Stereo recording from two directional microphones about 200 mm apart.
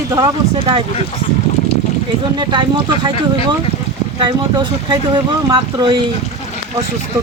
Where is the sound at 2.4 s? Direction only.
25° right (ahead or behind).